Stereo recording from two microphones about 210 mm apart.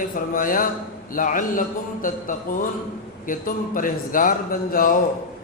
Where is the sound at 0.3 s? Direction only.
40° left (ahead or behind).